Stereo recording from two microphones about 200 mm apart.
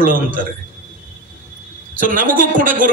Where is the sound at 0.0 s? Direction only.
45° right (ahead or behind).